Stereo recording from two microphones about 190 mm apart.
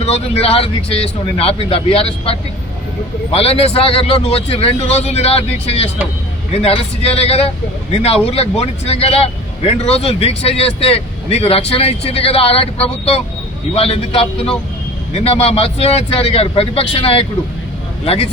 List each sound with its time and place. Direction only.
0.0 s speech: 30° left (ahead or behind)